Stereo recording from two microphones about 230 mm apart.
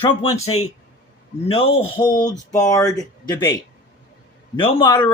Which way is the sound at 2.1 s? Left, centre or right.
Left.